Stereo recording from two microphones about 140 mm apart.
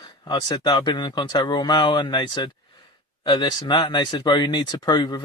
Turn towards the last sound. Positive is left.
turn(degrees=30)  # may be behind; listen again after turning